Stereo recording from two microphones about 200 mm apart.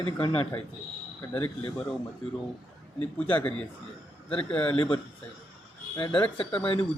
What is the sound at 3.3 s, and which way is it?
Speech, 5° left (ahead or behind).